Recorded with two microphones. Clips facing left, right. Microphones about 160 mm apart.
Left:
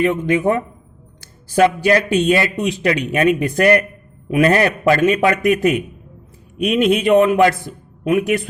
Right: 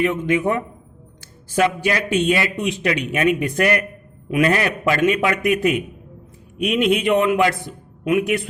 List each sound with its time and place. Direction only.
0.0 s a man's voice: 35° left (ahead or behind)